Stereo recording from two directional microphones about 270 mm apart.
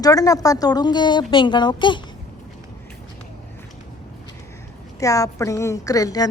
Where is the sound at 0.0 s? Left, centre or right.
Centre.